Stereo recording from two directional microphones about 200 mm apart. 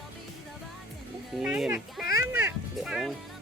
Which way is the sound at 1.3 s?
Centre (ahead or behind).